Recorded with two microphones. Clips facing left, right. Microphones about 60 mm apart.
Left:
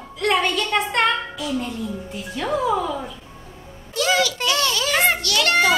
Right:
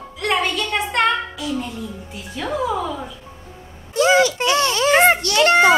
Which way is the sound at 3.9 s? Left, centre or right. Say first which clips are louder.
Right 5 dB; right.